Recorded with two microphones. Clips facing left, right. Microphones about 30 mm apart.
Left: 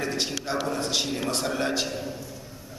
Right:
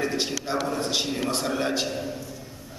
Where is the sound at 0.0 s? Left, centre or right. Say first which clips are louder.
Right 2 dB; centre.